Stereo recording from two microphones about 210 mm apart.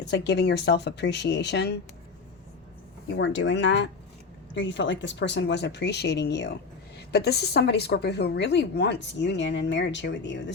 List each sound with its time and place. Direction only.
0.0 s speech: 55° left (ahead or behind)
3.2 s speech: 60° left (ahead or behind)